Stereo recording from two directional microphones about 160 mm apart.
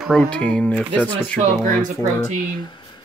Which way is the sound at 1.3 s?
55° right (ahead or behind).